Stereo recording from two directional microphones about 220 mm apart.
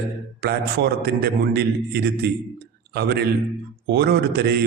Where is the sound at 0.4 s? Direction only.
45° right (ahead or behind).